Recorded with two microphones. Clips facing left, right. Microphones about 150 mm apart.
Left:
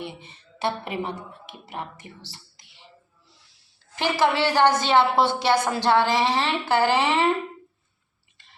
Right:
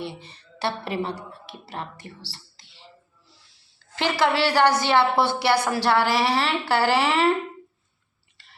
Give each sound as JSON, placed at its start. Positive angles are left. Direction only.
{"t": 0.0, "sound": "speech", "side_deg": 20}
{"t": 2.7, "sound": "music", "side_deg": 20}
{"t": 3.9, "sound": "a woman's voice", "side_deg": 15}